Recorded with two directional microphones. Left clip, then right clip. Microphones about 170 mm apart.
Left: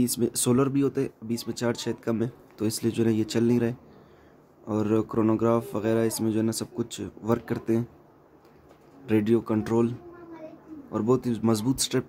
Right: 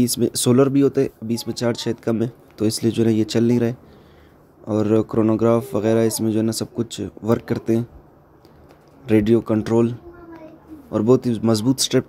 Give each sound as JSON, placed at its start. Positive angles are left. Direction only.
{"t": 0.0, "sound": "speech", "side_deg": -25}
{"t": 9.0, "sound": "speech", "side_deg": -25}